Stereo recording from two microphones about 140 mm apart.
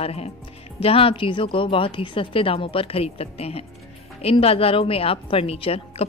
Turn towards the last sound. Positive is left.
turn(degrees=45)  # may be behind; listen again after turning